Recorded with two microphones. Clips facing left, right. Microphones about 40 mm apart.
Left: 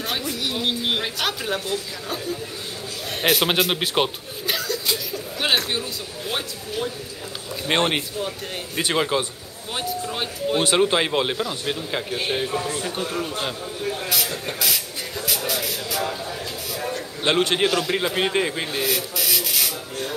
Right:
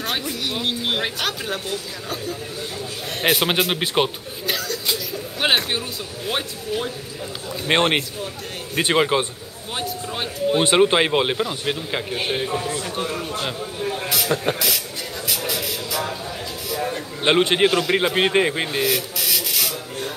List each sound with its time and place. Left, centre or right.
0.0 s speech: centre
3.2 s speech: centre
5.4 s a man's voice: centre
9.8 s speech: centre
10.6 s a man's voice: centre
12.4 s a man's voice: centre
16.9 s a man's voice: centre
18.7 s a sound: centre